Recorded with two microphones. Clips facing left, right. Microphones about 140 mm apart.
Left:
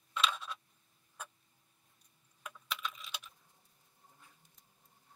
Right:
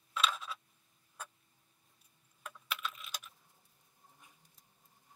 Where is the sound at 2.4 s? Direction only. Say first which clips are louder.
Even; 5° right (ahead or behind).